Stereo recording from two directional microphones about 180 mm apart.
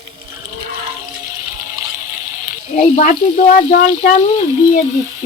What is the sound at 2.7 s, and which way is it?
Speech, 45° left (ahead or behind).